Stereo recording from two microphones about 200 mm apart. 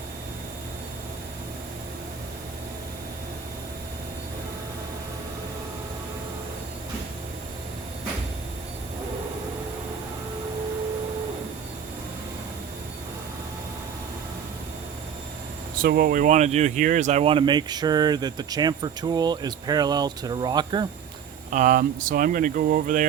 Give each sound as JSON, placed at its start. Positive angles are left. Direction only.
{"t": 15.8, "sound": "speech", "side_deg": -45}
{"t": 21.5, "sound": "speech", "side_deg": -40}